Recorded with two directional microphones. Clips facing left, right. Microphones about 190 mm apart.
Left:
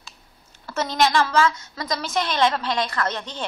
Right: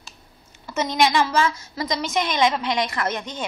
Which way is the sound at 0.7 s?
15° right (ahead or behind).